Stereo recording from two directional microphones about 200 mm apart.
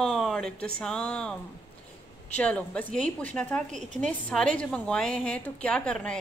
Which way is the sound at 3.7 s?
35° right (ahead or behind).